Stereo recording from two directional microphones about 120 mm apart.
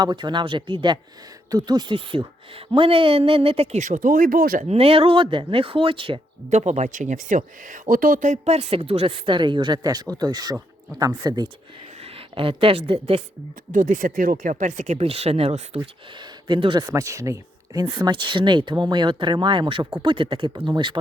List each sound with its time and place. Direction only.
0.0 s speech: 35° right (ahead or behind); by 3.8 s 55° right (ahead or behind)
3.8 s speech: 90° right
4.7 s speech: 55° right (ahead or behind)
6.5 s speech: 75° right (ahead or behind); by 7.8 s 90° right
8.2 s speech: 70° right (ahead or behind); by 11.4 s 35° right (ahead or behind)
12.0 s a woman's voice: 50° right (ahead or behind)
13.7 s speech: 90° right; by 15.8 s 55° right (ahead or behind)
16.5 s speech: 40° right (ahead or behind)
16.8 s speech: 25° right (ahead or behind)
17.8 s speech: 40° right (ahead or behind)